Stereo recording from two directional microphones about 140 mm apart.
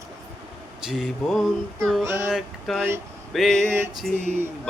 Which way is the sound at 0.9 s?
Centre (ahead or behind).